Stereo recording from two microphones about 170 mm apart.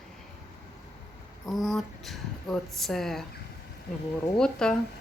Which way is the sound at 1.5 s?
Centre (ahead or behind).